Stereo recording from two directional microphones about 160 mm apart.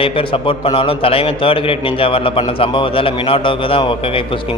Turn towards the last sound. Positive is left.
turn(degrees=35)  # may be behind; listen again after turning